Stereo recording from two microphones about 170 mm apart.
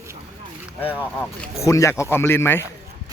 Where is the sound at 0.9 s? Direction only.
15° left (ahead or behind).